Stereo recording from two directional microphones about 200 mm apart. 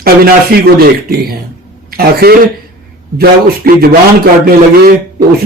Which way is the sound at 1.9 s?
50° right (ahead or behind).